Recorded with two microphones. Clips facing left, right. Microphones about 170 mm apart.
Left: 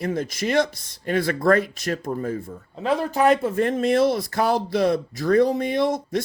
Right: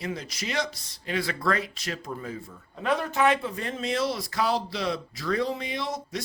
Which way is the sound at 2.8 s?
30° left (ahead or behind).